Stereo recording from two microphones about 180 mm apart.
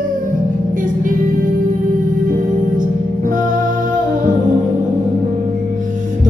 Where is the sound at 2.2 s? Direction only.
45° right (ahead or behind).